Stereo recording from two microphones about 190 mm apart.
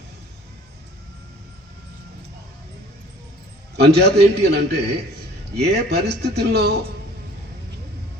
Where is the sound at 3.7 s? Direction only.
60° right (ahead or behind).